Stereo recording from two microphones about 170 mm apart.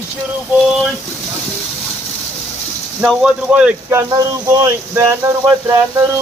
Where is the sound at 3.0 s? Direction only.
5° right (ahead or behind).